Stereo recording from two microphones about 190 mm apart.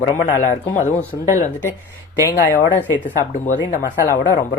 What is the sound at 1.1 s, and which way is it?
Speech, 25° left (ahead or behind).